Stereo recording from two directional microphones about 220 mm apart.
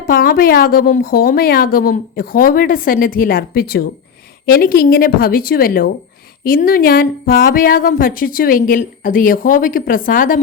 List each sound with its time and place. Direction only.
0.1 s speech: 40° left (ahead or behind)